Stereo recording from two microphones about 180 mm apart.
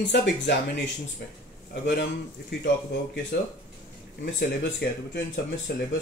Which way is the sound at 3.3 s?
75° left (ahead or behind).